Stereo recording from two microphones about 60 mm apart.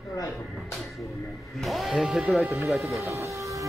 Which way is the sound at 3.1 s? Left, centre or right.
Right.